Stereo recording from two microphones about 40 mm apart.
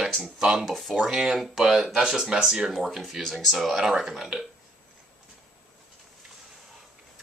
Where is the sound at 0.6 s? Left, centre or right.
Centre.